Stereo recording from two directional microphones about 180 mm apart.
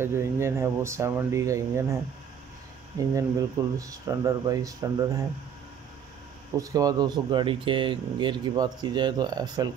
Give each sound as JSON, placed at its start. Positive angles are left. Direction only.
{"t": 0.0, "sound": "speech", "side_deg": -15}
{"t": 3.0, "sound": "speech", "side_deg": -20}
{"t": 6.6, "sound": "speech", "side_deg": -20}